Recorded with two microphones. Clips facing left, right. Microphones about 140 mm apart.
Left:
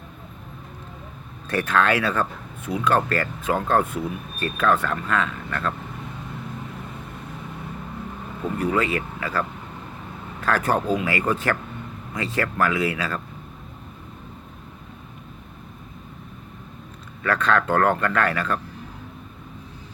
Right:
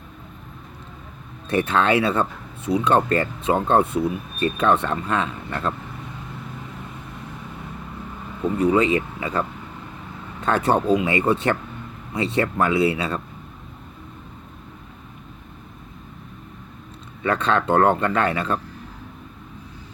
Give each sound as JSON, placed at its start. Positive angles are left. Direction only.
{"t": 1.5, "sound": "a man's voice", "side_deg": -25}
{"t": 8.6, "sound": "a man's voice", "side_deg": -20}
{"t": 17.2, "sound": "a man's voice", "side_deg": -25}